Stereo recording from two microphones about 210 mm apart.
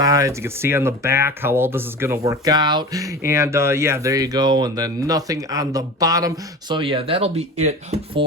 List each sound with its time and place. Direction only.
0.0 s speech: 15° right (ahead or behind); by 8.2 s 30° right (ahead or behind)